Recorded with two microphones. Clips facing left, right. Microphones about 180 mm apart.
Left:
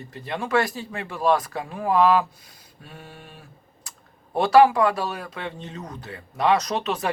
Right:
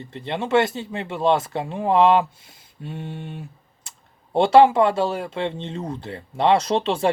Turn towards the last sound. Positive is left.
turn(degrees=-30)  # may be behind; listen again after turning